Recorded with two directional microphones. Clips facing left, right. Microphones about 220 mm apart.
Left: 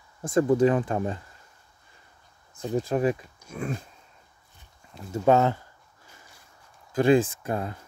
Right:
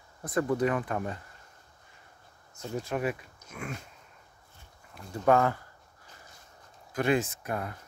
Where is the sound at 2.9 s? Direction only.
35° left (ahead or behind).